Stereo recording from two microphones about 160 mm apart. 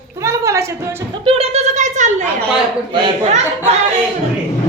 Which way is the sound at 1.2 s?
35° right (ahead or behind).